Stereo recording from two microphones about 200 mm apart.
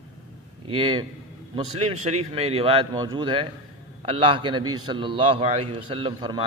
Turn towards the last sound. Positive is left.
turn(degrees=-25)  # may be behind; listen again after turning